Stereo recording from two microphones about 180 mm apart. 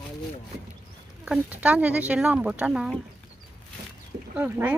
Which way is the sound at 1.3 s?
10° right (ahead or behind).